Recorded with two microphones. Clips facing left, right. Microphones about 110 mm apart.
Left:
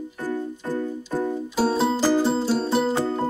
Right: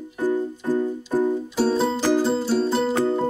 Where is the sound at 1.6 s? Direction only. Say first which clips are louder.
Left 1 dB; 5° left (ahead or behind).